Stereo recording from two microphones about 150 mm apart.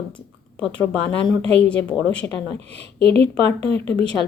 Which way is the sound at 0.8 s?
10° left (ahead or behind).